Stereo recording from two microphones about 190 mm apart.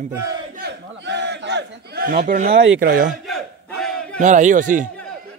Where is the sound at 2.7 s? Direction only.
45° right (ahead or behind).